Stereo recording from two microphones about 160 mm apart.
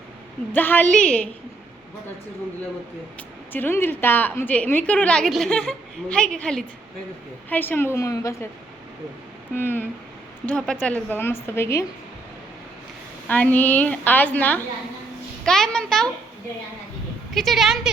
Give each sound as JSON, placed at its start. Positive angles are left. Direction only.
{"t": 0.5, "sound": "speech", "side_deg": 10}
{"t": 3.2, "sound": "speech", "side_deg": 10}
{"t": 9.6, "sound": "speech", "side_deg": 15}
{"t": 13.2, "sound": "a child's voice", "side_deg": 10}
{"t": 17.3, "sound": "a child's voice", "side_deg": 0}